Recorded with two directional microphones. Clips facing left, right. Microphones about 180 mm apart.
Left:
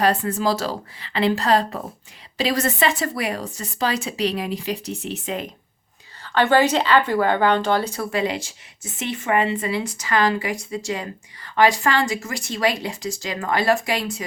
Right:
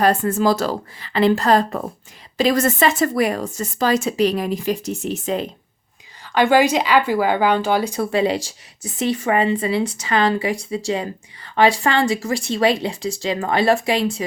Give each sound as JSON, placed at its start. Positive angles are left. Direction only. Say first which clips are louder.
{"t": 0.0, "sound": "speech", "louder": "right 3 dB", "side_deg": -50}
{"t": 6.2, "sound": "speech", "louder": "right 2 dB", "side_deg": -10}
{"t": 8.1, "sound": "speech", "louder": "right 5 dB", "side_deg": -30}